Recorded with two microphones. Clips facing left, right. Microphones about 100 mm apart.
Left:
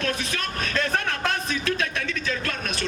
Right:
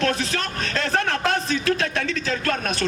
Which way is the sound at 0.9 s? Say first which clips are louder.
Right 4 dB; 35° right (ahead or behind).